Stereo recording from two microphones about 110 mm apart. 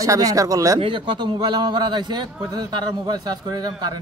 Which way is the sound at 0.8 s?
50° right (ahead or behind).